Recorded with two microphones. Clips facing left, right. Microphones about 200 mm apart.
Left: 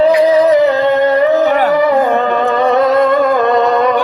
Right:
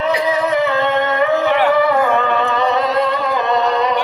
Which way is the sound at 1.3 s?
40° left (ahead or behind).